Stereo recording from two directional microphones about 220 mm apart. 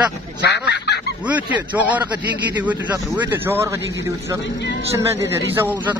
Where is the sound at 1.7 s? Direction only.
5° right (ahead or behind).